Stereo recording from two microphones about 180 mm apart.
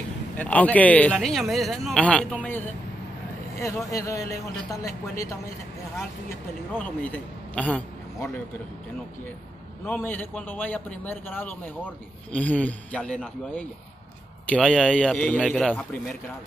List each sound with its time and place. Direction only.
0.4 s a man's voice: 10° left (ahead or behind)
3.9 s a man's voice: 20° left (ahead or behind)
9.8 s a man's voice: 10° left (ahead or behind)